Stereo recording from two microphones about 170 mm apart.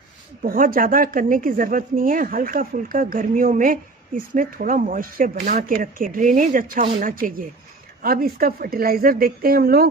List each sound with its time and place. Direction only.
0.4 s speech: 55° right (ahead or behind)